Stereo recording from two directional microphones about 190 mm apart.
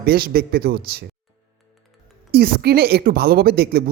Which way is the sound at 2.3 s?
55° right (ahead or behind).